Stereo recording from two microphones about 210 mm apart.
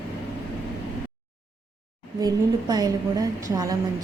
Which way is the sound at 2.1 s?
20° right (ahead or behind).